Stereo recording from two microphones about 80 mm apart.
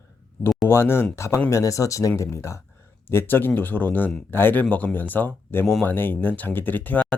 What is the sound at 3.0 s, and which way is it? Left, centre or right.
Speech, left.